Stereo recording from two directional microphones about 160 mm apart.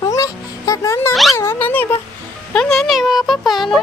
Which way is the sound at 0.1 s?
20° left (ahead or behind).